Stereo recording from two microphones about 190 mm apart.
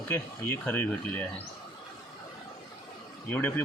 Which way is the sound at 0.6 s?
10° left (ahead or behind).